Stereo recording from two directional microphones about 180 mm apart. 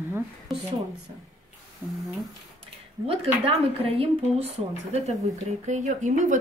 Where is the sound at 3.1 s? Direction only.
35° right (ahead or behind).